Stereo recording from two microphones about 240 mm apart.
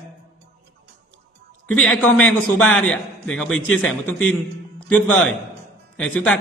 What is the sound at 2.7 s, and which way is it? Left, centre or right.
Speech, centre.